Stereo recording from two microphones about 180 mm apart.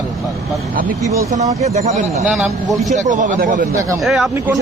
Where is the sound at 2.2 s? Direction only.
Centre (ahead or behind).